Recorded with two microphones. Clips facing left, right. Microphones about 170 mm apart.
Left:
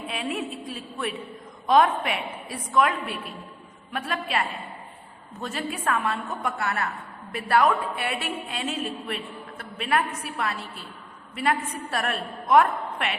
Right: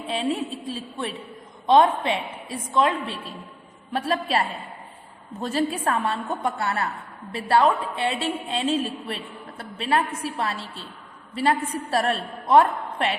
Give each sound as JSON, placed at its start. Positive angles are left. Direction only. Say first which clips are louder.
{"t": 0.1, "sound": "a woman's voice", "louder": "right 5 dB", "side_deg": -30}